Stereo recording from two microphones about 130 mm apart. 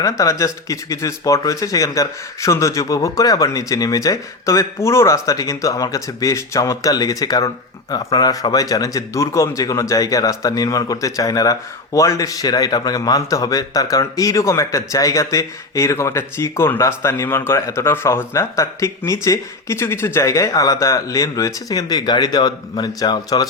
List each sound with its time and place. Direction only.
0.0 s speech: 25° left (ahead or behind)